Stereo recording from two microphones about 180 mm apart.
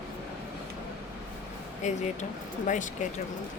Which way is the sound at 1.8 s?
40° left (ahead or behind).